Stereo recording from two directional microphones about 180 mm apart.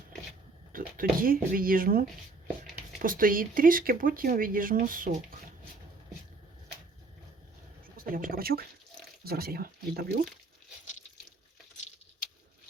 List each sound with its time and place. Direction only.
0.7 s speech: 50° right (ahead or behind)
7.9 s speech: 55° right (ahead or behind)